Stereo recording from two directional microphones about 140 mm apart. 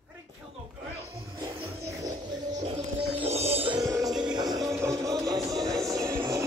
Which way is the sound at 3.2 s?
50° right (ahead or behind).